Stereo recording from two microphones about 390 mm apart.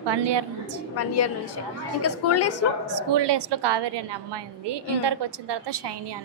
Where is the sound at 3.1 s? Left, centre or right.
Right.